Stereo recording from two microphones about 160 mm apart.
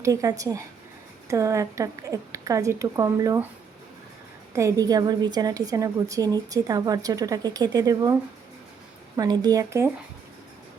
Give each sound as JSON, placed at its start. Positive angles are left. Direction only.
{"t": 0.0, "sound": "a woman's voice", "side_deg": -20}
{"t": 4.5, "sound": "a woman's voice", "side_deg": -20}
{"t": 9.1, "sound": "a woman's voice", "side_deg": -25}